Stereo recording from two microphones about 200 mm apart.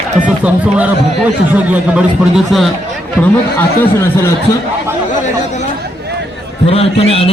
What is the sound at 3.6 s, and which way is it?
Speech, 15° left (ahead or behind).